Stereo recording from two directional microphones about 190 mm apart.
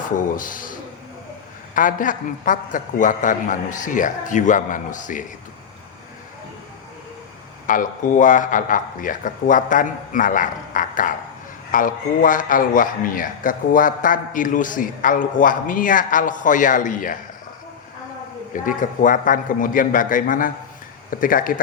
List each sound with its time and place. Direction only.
0.2 s a man's voice: 45° left (ahead or behind)
7.7 s a man's voice: 45° left (ahead or behind)
18.5 s a man's voice: 45° left (ahead or behind)